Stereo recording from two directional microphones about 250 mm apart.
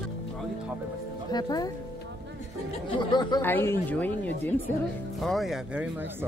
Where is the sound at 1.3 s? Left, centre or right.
Centre.